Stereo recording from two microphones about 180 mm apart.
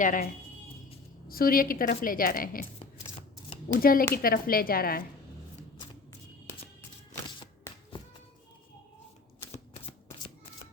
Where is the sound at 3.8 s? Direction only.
55° left (ahead or behind).